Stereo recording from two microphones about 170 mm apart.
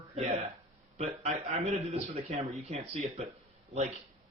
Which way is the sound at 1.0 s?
35° right (ahead or behind).